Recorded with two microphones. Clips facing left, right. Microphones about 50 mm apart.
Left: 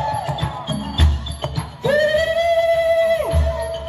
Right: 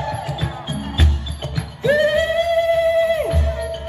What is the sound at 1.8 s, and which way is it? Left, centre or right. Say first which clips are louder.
Music: even; right.